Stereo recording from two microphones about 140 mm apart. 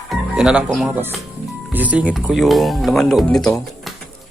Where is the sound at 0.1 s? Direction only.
5° right (ahead or behind).